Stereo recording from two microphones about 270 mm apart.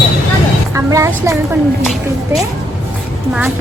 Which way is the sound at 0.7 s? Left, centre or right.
Centre.